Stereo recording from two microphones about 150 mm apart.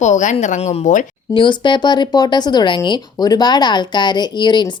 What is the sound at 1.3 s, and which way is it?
Speech, 30° left (ahead or behind).